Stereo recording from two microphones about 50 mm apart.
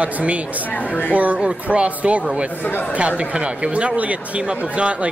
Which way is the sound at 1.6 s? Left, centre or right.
Right.